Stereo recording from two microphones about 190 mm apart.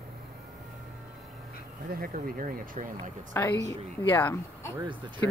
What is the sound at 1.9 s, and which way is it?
Speech, 50° right (ahead or behind).